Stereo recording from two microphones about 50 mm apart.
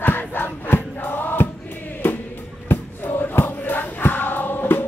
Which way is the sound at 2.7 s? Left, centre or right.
Left.